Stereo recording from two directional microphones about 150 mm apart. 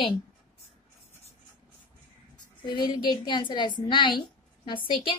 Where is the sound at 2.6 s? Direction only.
30° left (ahead or behind).